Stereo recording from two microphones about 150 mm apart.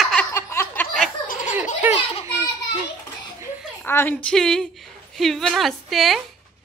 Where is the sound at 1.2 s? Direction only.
65° left (ahead or behind).